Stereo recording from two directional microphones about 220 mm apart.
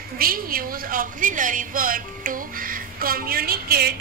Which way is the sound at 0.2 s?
40° right (ahead or behind).